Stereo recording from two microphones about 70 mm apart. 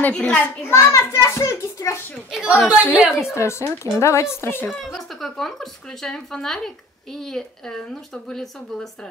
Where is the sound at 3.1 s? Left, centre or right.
Left.